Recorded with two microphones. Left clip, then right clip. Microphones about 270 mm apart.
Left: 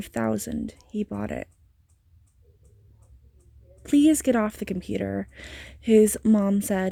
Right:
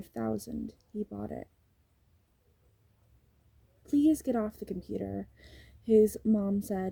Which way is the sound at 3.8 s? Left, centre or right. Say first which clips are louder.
Left 7 dB; left.